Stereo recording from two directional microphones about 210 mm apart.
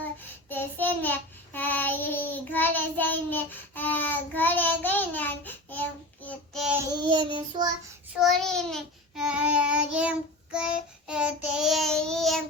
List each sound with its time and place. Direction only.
0.0 s child singing: 10° left (ahead or behind)
6.9 s child singing: 20° right (ahead or behind)
8.2 s child singing: centre (ahead or behind)